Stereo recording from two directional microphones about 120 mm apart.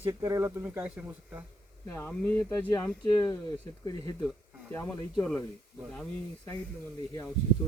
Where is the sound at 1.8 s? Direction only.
20° left (ahead or behind).